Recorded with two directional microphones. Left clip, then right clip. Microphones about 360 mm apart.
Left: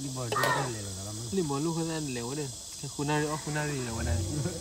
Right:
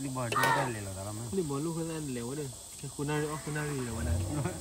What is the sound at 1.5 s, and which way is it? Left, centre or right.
Speech, left.